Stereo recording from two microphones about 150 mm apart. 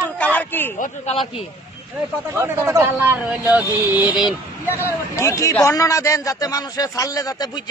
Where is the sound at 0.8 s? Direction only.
45° left (ahead or behind).